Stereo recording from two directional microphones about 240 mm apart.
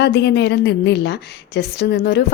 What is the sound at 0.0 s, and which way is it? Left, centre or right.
A woman's voice, left.